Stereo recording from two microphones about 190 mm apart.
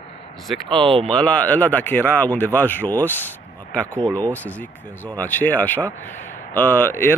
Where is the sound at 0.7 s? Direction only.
30° right (ahead or behind).